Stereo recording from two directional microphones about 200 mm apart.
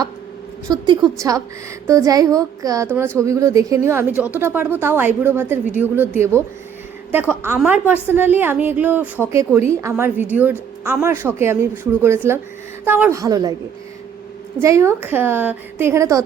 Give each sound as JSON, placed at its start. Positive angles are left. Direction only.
{"t": 0.7, "sound": "a woman's voice", "side_deg": -20}
{"t": 7.4, "sound": "speech", "side_deg": -10}
{"t": 14.6, "sound": "speech", "side_deg": -15}